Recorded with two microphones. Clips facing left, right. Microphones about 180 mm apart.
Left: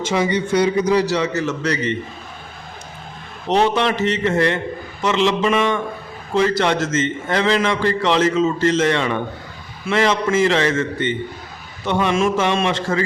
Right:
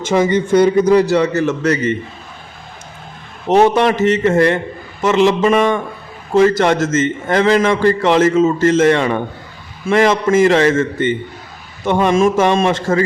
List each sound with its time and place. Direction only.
0.0 s a man's voice: 50° right (ahead or behind)
3.5 s a man's voice: 50° right (ahead or behind)